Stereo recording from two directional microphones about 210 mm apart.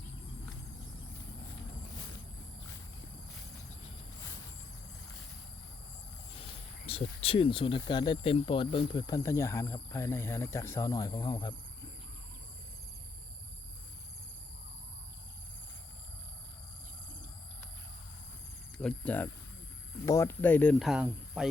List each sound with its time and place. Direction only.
6.4 s speech: 30° left (ahead or behind)
18.8 s speech: 5° left (ahead or behind)